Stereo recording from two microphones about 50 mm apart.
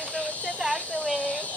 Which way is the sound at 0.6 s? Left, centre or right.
Centre.